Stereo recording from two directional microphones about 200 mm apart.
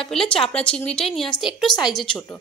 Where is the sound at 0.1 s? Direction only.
5° left (ahead or behind).